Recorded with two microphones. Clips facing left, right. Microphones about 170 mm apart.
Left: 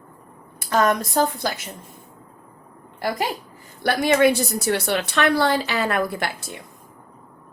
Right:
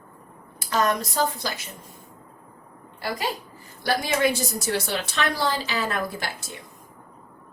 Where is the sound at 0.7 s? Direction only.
50° left (ahead or behind).